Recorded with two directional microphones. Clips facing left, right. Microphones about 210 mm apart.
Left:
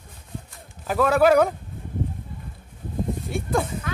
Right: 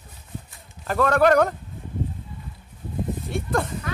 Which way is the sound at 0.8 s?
5° left (ahead or behind).